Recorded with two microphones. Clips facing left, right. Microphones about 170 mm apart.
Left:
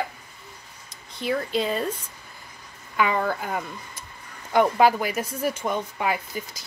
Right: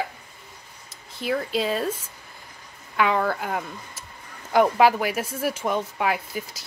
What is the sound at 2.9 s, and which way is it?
A woman's voice, centre (ahead or behind).